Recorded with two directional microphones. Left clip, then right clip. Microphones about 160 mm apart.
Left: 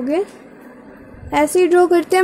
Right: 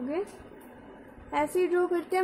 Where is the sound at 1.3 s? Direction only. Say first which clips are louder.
Left 13 dB; 40° left (ahead or behind).